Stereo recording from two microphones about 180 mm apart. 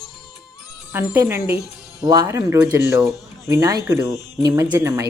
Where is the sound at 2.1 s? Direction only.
20° right (ahead or behind).